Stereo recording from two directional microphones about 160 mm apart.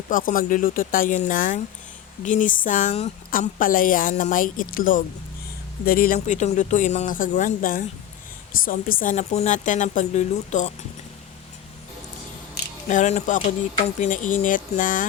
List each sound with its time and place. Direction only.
0.1 s a woman's voice: 60° left (ahead or behind)
6.1 s speech: 50° left (ahead or behind)
12.9 s a woman's voice: 50° left (ahead or behind)